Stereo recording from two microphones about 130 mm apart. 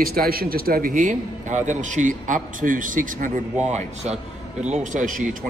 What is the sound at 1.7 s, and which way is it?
A man's voice, 70° right (ahead or behind).